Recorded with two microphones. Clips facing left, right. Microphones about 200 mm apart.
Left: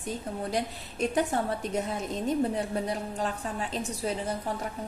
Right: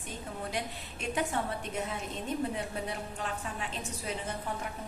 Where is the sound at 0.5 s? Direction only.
40° left (ahead or behind).